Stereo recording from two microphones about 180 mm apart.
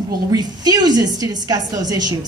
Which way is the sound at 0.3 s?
20° right (ahead or behind).